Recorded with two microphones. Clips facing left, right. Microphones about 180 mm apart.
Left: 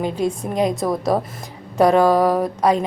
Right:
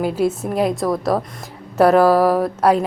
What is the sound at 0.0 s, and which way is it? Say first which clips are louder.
A woman's voice: right 2 dB; 5° right (ahead or behind).